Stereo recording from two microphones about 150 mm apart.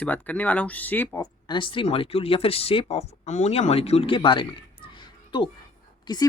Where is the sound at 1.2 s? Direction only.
30° left (ahead or behind).